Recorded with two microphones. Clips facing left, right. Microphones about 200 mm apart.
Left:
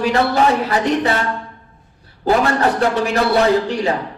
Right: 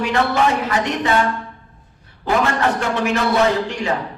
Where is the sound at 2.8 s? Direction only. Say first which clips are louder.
Left 3 dB; 35° left (ahead or behind).